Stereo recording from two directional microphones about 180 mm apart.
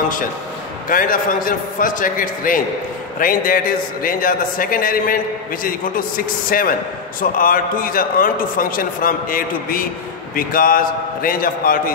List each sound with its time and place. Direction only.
0.8 s a man's voice: 50° left (ahead or behind)